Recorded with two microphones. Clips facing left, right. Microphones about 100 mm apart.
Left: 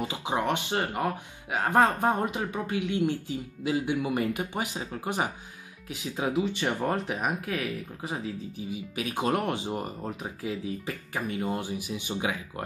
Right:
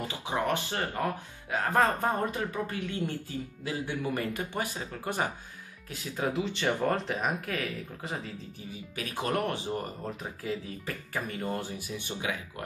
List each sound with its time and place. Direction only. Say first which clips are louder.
0.0 s speech: left 2 dB; 20° left (ahead or behind)
12.2 s speech: left 4 dB; 25° left (ahead or behind)